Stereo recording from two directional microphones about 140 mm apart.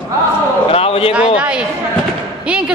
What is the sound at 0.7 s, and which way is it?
Speech, 45° left (ahead or behind).